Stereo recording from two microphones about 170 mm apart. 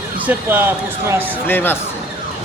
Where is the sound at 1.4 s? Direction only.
10° left (ahead or behind).